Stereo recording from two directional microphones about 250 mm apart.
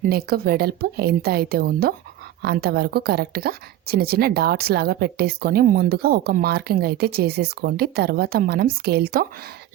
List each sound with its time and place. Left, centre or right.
0.0 s a woman's voice: right